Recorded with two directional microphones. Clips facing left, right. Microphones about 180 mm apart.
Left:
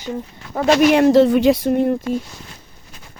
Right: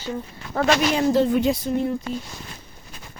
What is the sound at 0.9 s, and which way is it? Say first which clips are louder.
Speech: left 7 dB; 75° left (ahead or behind).